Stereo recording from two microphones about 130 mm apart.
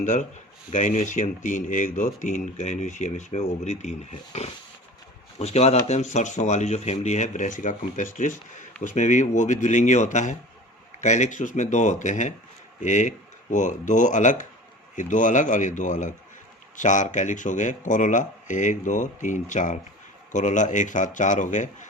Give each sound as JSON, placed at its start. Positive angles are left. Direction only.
{"t": 0.0, "sound": "speech", "side_deg": 70}